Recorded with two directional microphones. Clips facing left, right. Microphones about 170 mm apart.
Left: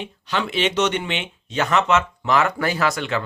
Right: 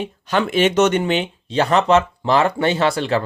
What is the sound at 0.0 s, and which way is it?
Speech, 50° right (ahead or behind).